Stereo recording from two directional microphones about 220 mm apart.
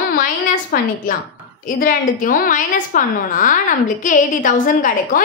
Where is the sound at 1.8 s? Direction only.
40° left (ahead or behind).